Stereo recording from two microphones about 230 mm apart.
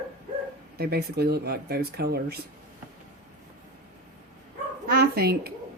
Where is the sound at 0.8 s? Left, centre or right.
Right.